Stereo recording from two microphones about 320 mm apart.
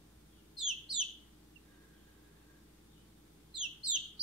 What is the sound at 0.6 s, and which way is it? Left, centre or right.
Bird, centre.